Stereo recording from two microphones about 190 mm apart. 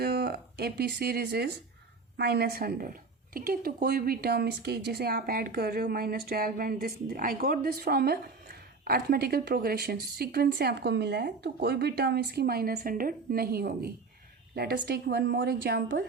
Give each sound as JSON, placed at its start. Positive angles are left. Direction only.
{"t": 0.0, "sound": "a woman's voice", "side_deg": -55}